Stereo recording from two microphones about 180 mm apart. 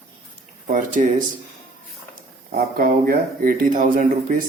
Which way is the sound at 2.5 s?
55° right (ahead or behind).